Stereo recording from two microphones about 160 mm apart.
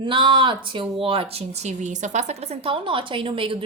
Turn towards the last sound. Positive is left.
turn(degrees=-35)  # may be behind; listen again after turning